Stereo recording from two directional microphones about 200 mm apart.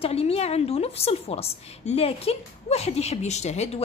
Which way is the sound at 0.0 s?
30° left (ahead or behind).